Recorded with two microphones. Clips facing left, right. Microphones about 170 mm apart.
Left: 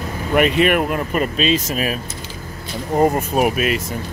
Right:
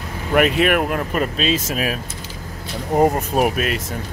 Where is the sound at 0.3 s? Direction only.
Centre (ahead or behind).